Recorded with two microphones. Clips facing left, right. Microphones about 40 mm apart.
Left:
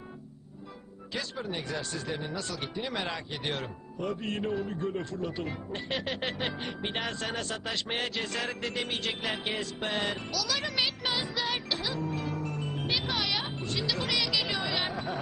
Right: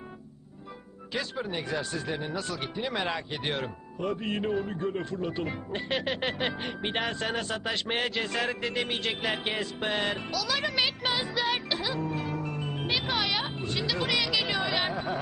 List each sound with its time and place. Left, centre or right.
1.1 s a man's voice: centre
14.8 s speech: centre